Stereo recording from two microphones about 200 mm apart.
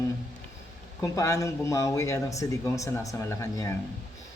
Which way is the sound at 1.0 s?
15° left (ahead or behind).